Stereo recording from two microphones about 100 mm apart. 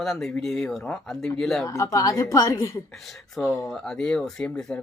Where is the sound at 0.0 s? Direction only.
5° left (ahead or behind).